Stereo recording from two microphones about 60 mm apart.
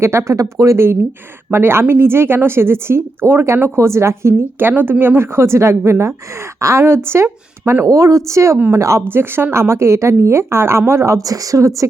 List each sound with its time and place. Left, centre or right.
0.0 s a woman's voice: right
0.3 s speech: right
1.5 s a woman's voice: right
4.7 s a woman's voice: right
7.9 s speech: right
9.0 s a woman's voice: right